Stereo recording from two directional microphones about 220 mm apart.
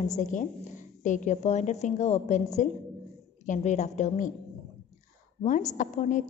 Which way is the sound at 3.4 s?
35° left (ahead or behind).